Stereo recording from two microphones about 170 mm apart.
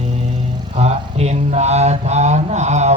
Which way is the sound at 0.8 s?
40° right (ahead or behind).